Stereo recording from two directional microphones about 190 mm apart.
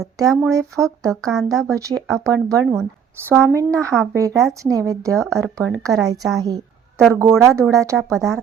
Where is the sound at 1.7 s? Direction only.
15° right (ahead or behind).